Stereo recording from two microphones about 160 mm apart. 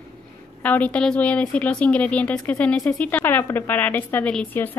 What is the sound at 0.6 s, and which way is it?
Speech, 10° left (ahead or behind).